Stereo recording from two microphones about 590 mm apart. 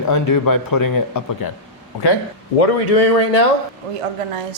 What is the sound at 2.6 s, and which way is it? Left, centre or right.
Speech, left.